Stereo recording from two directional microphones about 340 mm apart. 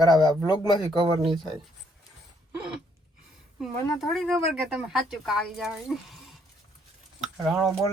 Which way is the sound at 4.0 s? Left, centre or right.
Centre.